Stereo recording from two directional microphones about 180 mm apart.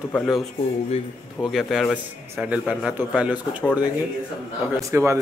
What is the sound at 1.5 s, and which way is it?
A man's voice, centre (ahead or behind).